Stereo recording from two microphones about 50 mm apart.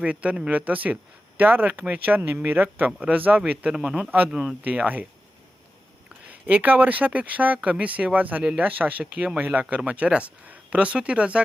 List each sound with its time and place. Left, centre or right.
0.0 s speech: right
4.3 s speech: centre
4.6 s speech: right
6.2 s speech: right